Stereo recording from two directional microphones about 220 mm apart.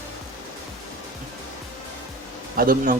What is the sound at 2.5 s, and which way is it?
Speech, 40° right (ahead or behind).